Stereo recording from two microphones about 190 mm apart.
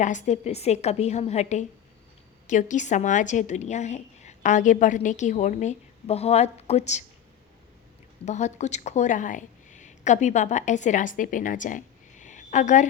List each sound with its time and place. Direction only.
0.0 s a woman's voice: 40° left (ahead or behind)
8.2 s a woman's voice: 35° left (ahead or behind)